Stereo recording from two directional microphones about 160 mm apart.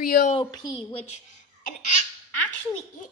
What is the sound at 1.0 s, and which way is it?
Speech, 50° left (ahead or behind).